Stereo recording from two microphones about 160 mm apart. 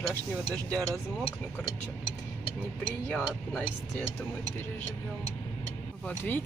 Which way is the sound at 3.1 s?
10° left (ahead or behind).